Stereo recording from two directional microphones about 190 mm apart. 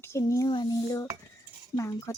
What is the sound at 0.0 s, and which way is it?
A woman's voice, 15° left (ahead or behind).